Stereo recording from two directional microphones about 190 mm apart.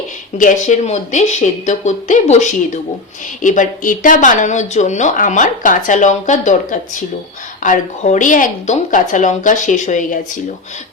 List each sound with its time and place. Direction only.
0.3 s speech: 40° left (ahead or behind)